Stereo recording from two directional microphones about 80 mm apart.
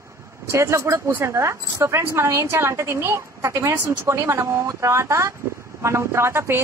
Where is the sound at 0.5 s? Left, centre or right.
Right.